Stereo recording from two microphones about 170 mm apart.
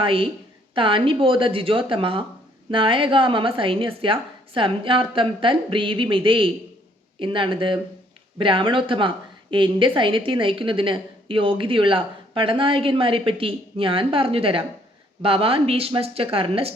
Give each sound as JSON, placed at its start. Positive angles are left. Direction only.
{"t": 0.0, "sound": "a woman's voice", "side_deg": -30}